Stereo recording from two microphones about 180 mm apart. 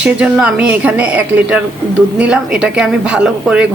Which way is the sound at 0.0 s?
5° right (ahead or behind).